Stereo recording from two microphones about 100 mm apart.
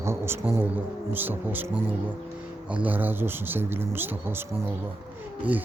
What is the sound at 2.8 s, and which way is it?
Speech, 15° right (ahead or behind).